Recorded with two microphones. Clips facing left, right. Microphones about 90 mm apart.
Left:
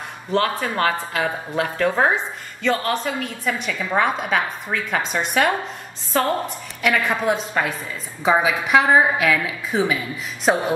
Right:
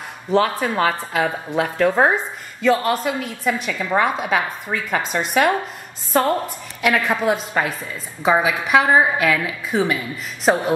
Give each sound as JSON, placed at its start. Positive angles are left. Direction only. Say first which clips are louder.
{"t": 0.3, "sound": "a woman's voice", "louder": "right 3 dB", "side_deg": 0}
{"t": 6.8, "sound": "a woman's voice", "louder": "right 2 dB", "side_deg": 0}